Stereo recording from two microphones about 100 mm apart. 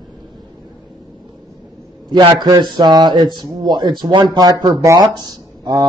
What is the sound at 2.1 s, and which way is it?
Speech, 50° right (ahead or behind).